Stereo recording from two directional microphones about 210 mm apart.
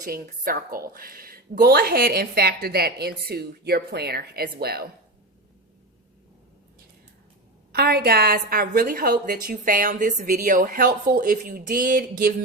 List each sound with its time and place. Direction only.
0.0 s a woman's voice: 40° right (ahead or behind)
7.7 s a woman's voice: 50° right (ahead or behind)